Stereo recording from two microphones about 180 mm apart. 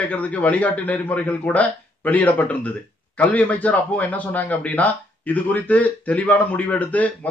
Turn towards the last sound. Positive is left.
turn(degrees=10)  # may be behind; listen again after turning